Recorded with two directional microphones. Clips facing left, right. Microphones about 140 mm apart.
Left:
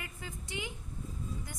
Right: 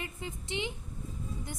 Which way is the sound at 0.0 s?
25° right (ahead or behind).